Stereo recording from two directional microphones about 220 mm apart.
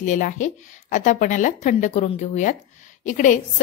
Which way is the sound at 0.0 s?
35° left (ahead or behind).